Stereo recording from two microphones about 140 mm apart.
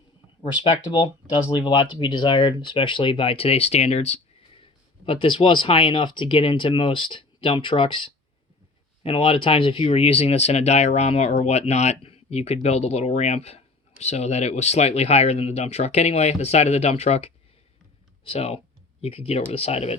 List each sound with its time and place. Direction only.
0.4 s speech: 35° left (ahead or behind); by 4.2 s 50° left (ahead or behind)
4.6 s speech: 40° left (ahead or behind)